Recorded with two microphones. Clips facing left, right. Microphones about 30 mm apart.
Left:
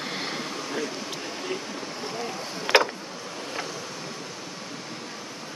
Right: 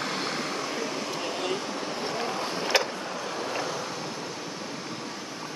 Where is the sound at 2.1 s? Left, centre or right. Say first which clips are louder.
Right 3 dB; right.